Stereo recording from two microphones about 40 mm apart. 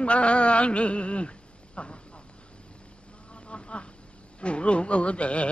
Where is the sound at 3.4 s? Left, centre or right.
Left.